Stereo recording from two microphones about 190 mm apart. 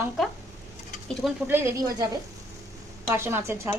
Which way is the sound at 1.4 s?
10° right (ahead or behind).